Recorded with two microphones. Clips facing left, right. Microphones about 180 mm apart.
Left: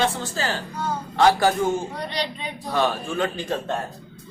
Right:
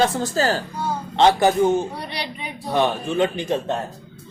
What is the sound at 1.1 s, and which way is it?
A man's voice, 20° right (ahead or behind).